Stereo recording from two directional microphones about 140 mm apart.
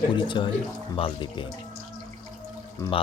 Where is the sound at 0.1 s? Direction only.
35° left (ahead or behind).